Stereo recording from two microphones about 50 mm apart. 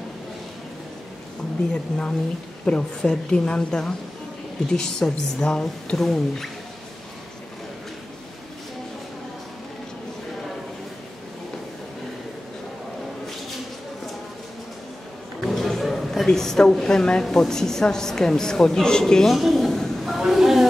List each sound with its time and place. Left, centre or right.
1.7 s a woman's voice: centre
5.9 s speech: centre
15.5 s a sound: centre
17.2 s a woman's voice: centre
19.3 s a sound: centre
20.2 s speech: centre